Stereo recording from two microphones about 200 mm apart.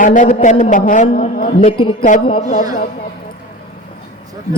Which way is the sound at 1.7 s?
25° left (ahead or behind).